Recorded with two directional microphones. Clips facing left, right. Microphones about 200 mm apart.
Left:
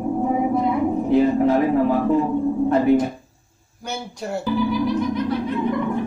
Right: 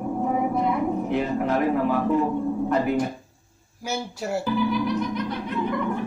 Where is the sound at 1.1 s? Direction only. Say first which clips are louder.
Left 10 dB; 30° left (ahead or behind).